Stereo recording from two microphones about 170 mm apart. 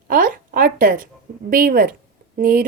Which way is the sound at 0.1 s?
55° right (ahead or behind).